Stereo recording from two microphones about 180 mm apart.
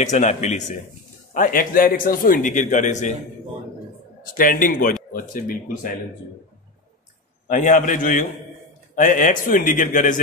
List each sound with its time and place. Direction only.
0.0 s a man's voice: 40° left (ahead or behind)
4.4 s a man's voice: 50° left (ahead or behind)
7.4 s a man's voice: 45° left (ahead or behind)